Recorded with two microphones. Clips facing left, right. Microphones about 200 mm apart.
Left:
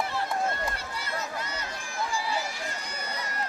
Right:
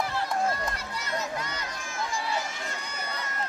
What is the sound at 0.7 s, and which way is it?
Run, 30° left (ahead or behind).